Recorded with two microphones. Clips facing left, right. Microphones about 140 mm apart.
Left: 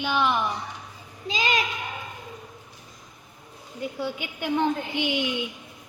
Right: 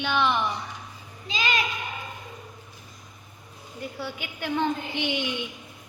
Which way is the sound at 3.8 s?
15° left (ahead or behind).